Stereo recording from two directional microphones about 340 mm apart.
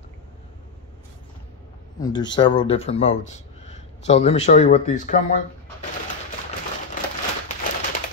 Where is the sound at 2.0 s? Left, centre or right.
Centre.